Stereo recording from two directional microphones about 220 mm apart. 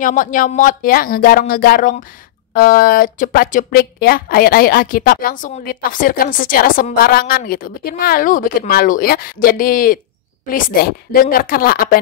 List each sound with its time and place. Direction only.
0.0 s speech: 35° left (ahead or behind)